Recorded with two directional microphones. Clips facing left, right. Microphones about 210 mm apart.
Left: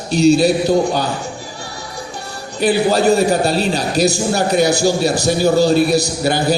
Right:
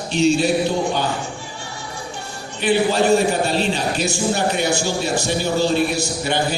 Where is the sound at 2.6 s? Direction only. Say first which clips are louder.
Left 3 dB; 40° left (ahead or behind).